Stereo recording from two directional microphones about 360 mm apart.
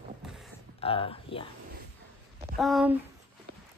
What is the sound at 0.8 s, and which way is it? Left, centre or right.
Speech, centre.